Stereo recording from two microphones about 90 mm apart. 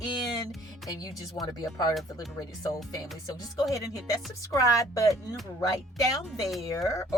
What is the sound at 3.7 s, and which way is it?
Speech, 40° left (ahead or behind).